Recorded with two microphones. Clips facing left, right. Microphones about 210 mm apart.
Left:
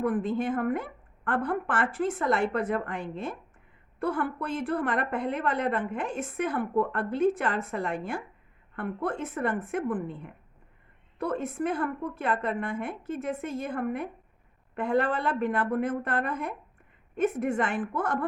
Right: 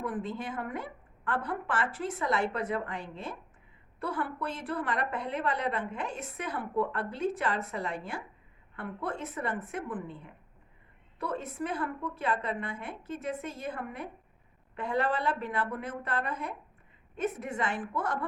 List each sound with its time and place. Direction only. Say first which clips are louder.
0.0 s a woman's voice: left 8 dB; 55° left (ahead or behind)